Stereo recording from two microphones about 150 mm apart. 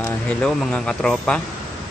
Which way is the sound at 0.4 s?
5° left (ahead or behind).